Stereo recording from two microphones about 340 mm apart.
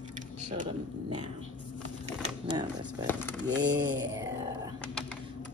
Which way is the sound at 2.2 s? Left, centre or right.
Centre.